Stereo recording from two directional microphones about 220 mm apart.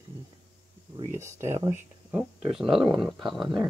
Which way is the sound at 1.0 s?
10° right (ahead or behind).